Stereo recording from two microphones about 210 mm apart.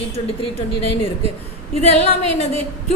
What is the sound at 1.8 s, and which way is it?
Speech, 30° left (ahead or behind).